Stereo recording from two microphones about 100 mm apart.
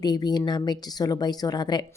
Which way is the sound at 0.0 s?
45° left (ahead or behind).